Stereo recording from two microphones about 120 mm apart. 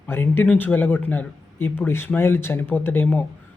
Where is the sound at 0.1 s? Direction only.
20° left (ahead or behind).